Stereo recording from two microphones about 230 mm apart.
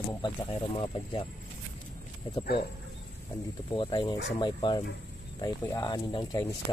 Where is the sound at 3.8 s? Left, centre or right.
Centre.